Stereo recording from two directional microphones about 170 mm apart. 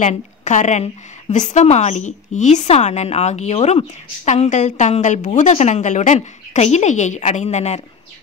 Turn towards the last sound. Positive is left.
turn(degrees=40)  # may be behind; listen again after turning